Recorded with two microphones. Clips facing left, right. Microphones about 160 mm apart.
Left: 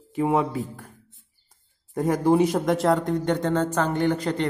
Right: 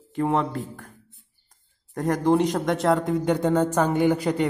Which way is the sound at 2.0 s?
5° left (ahead or behind).